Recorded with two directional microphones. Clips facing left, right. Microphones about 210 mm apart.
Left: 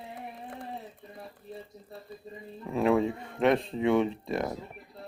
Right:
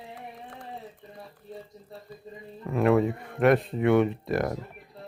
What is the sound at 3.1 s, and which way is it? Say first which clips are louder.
Speech: right 3 dB; 25° left (ahead or behind).